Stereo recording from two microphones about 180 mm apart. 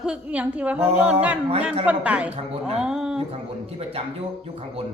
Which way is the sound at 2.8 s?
5° right (ahead or behind).